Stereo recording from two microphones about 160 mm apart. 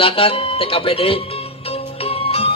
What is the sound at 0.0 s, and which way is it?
Speech, 35° left (ahead or behind).